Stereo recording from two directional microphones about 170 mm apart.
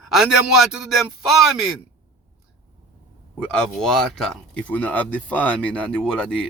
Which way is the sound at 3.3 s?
5° left (ahead or behind).